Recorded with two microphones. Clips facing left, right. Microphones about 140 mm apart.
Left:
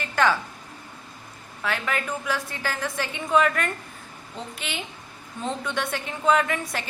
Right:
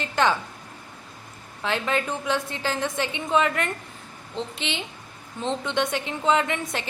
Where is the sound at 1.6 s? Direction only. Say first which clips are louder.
Right 3 dB; 25° right (ahead or behind).